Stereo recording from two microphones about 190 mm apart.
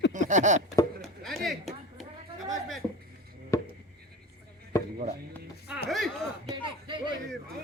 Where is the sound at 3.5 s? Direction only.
15° left (ahead or behind).